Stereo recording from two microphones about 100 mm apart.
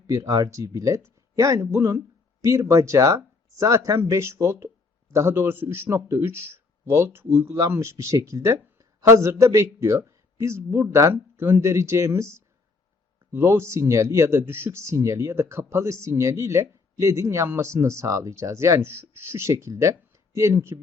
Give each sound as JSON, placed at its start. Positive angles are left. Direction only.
{"t": 0.1, "sound": "speech", "side_deg": -35}